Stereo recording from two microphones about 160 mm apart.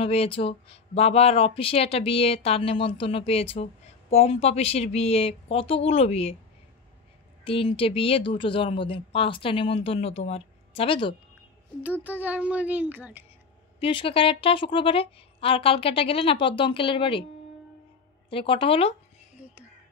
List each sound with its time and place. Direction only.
0.0 s speech: 35° left (ahead or behind)
7.4 s speech: 35° left (ahead or behind)
11.8 s speech: 10° right (ahead or behind)
13.7 s speech: 35° left (ahead or behind)
18.3 s speech: 35° left (ahead or behind)